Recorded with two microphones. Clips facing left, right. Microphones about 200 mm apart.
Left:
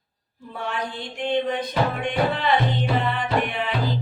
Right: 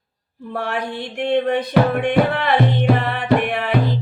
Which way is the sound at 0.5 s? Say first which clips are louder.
Right 6 dB; 70° right (ahead or behind).